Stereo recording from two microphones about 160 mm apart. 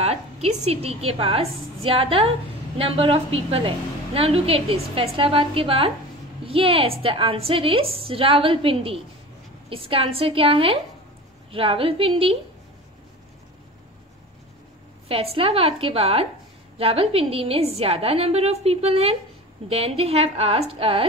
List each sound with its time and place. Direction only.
0.0 s a woman's voice: 40° right (ahead or behind)
15.0 s a woman's voice: 35° right (ahead or behind)